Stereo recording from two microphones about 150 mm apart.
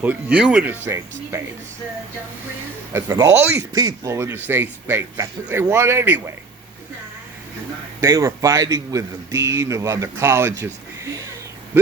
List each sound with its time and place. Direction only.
0.0 s speech: 10° right (ahead or behind)
2.9 s speech: 15° right (ahead or behind)
8.0 s a man's voice: 20° right (ahead or behind)